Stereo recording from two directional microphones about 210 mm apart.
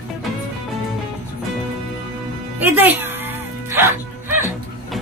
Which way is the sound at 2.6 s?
10° right (ahead or behind).